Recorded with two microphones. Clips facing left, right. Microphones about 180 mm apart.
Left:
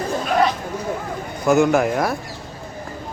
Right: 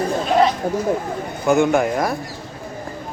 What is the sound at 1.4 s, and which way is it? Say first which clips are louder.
Speech: even; centre (ahead or behind).